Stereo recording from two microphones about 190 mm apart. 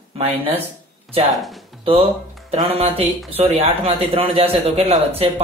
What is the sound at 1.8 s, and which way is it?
Speech, 30° right (ahead or behind).